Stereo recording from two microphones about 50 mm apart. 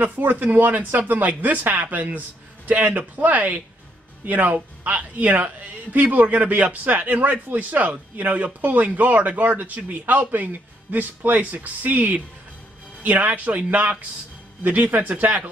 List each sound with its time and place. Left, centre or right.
0.0 s a man's voice: right